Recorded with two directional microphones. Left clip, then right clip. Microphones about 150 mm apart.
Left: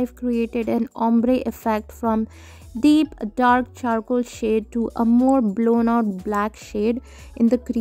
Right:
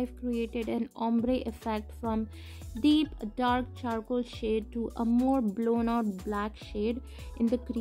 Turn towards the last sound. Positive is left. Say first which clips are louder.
# left 10 dB
turn(degrees=50)  # may be behind; listen again after turning